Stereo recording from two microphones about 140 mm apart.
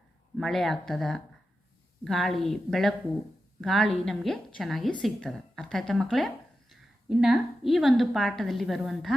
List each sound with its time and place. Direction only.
0.3 s a woman's voice: centre (ahead or behind)